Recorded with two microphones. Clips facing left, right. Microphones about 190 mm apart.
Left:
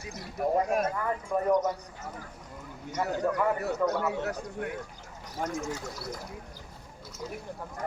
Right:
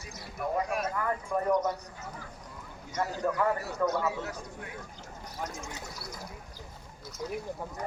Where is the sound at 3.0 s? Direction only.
60° left (ahead or behind).